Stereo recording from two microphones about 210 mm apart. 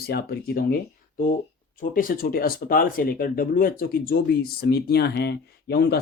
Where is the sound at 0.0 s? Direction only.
50° left (ahead or behind).